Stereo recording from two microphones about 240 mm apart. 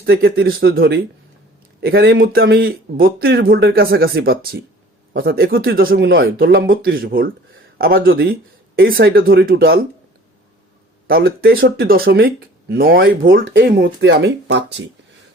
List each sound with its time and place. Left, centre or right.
0.0 s speech: right
11.0 s speech: right